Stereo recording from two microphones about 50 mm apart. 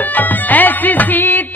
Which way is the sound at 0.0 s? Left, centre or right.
Left.